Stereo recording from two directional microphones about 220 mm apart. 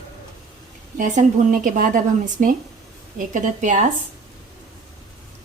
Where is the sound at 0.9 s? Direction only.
35° right (ahead or behind).